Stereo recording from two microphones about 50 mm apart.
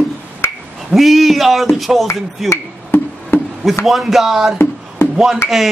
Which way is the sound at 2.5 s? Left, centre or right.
Left.